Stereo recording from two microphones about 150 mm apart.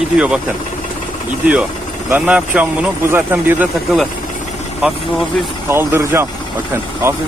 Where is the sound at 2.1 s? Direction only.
10° right (ahead or behind).